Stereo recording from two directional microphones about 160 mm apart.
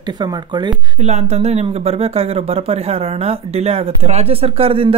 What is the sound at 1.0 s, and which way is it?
Speech, 40° right (ahead or behind).